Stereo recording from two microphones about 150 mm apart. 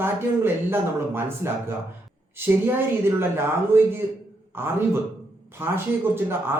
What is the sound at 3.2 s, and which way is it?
Speech, 15° right (ahead or behind).